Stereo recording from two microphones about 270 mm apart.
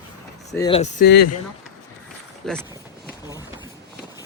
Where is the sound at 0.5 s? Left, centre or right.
Centre.